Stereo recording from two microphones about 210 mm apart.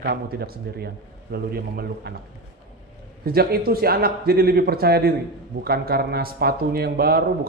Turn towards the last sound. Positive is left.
turn(degrees=-45)  # may be behind; listen again after turning